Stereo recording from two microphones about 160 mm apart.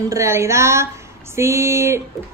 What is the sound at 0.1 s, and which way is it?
A woman's voice, 15° right (ahead or behind).